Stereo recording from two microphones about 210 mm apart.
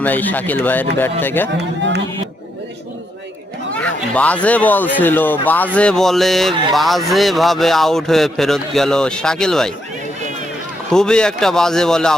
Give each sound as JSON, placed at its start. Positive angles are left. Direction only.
{"t": 0.0, "sound": "speech", "side_deg": 10}
{"t": 1.5, "sound": "speech", "side_deg": -55}
{"t": 3.8, "sound": "speech", "side_deg": 5}
{"t": 10.9, "sound": "speech", "side_deg": 5}